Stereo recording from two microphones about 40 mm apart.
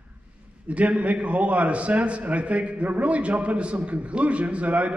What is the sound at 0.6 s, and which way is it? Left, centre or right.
A man's voice, right.